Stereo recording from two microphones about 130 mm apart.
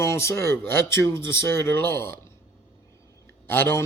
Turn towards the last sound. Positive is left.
turn(degrees=20)  # may be behind; listen again after turning